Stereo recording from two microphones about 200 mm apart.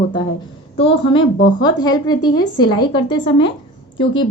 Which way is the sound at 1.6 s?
20° left (ahead or behind).